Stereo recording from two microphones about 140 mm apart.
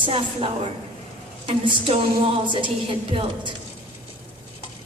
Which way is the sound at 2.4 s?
35° right (ahead or behind).